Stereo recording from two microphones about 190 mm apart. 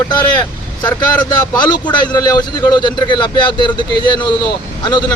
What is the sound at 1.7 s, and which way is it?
Speech, 25° left (ahead or behind).